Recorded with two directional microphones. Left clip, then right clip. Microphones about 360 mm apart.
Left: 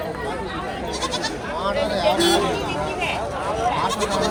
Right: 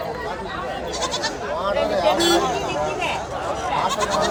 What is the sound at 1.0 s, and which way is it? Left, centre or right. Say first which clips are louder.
Goat: right 1 dB; centre.